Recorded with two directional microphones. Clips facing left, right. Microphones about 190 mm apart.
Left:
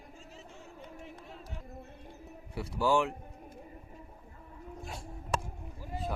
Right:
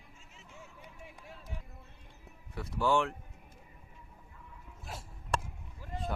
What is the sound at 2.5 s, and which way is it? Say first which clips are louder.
Speech: left 1 dB; 10° left (ahead or behind).